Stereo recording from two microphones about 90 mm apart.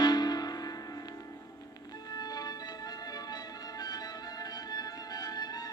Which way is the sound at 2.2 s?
45° left (ahead or behind).